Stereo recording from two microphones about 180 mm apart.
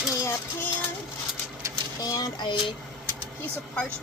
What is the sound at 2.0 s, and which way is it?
Speech, 20° left (ahead or behind).